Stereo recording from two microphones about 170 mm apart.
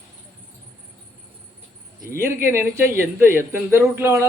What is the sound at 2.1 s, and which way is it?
A man's voice, 15° right (ahead or behind).